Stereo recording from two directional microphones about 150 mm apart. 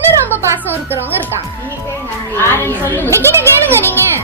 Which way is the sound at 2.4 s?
15° left (ahead or behind).